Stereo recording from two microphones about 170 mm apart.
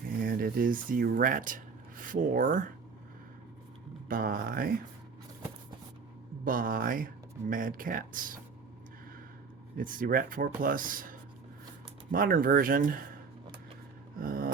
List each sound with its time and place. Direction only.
0.2 s speech: 60° right (ahead or behind)
4.1 s speech: 55° right (ahead or behind)
6.4 s speech: 55° right (ahead or behind)
9.7 s speech: 55° right (ahead or behind)
14.2 s speech: 55° right (ahead or behind)